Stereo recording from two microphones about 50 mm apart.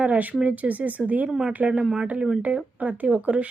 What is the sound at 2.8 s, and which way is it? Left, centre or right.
Speech, right.